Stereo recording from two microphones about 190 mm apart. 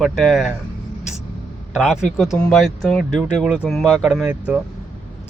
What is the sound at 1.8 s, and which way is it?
Speech, centre (ahead or behind).